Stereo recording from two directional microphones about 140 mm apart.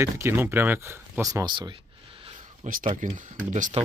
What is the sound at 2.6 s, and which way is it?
Speech, 70° right (ahead or behind).